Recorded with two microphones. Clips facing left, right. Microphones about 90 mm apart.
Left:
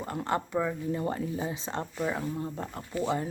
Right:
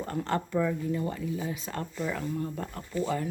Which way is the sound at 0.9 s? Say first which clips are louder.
Even; 35° left (ahead or behind).